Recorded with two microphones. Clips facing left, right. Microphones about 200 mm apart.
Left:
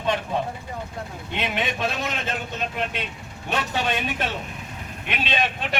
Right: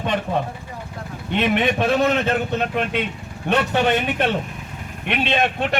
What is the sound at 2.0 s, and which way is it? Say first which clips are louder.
Speech: right 10 dB; 60° right (ahead or behind).